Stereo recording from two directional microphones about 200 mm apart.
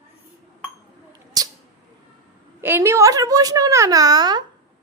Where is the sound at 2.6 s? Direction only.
10° right (ahead or behind).